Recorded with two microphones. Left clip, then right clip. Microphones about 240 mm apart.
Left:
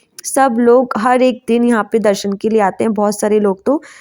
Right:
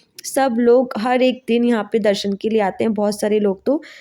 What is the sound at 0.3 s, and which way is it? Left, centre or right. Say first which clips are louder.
A woman's voice: left 4 dB; centre.